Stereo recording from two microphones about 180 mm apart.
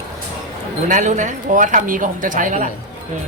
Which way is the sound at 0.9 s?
45° right (ahead or behind).